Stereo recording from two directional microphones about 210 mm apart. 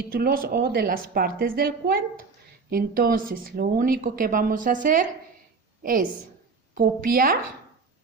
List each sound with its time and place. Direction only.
0.1 s a woman's voice: 45° right (ahead or behind)